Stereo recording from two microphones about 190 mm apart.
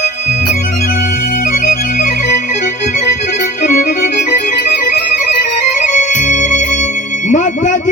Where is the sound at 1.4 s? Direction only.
40° left (ahead or behind).